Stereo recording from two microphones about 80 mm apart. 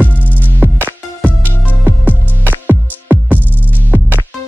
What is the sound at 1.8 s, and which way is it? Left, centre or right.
Music, right.